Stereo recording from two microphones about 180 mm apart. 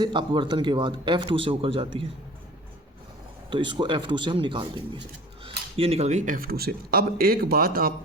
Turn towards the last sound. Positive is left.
turn(degrees=-55)  # may be behind; listen again after turning